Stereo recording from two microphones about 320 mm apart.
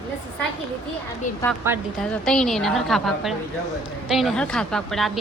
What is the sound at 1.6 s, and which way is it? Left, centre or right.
A woman's voice, centre.